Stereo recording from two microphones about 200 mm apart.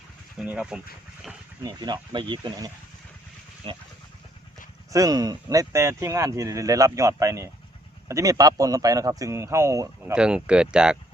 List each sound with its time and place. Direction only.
0.3 s speech: 5° right (ahead or behind)
1.6 s speech: 20° right (ahead or behind)
4.9 s speech: 15° right (ahead or behind)
10.2 s speech: 5° right (ahead or behind)